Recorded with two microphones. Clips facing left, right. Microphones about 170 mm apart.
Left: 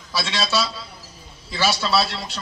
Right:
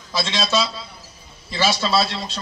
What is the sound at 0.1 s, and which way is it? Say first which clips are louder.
A man's voice: right 2 dB; 20° right (ahead or behind).